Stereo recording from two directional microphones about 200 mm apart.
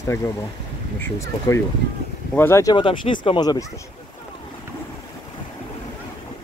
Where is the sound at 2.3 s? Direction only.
10° left (ahead or behind).